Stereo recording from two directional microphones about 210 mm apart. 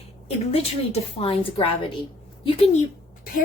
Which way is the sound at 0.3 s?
30° left (ahead or behind).